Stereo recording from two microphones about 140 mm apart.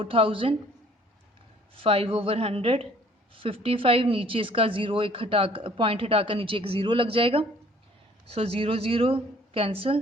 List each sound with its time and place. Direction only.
0.0 s a woman's voice: 40° right (ahead or behind)
1.7 s a woman's voice: 40° right (ahead or behind)